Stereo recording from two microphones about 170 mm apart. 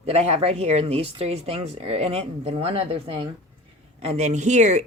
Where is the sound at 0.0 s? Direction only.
40° right (ahead or behind).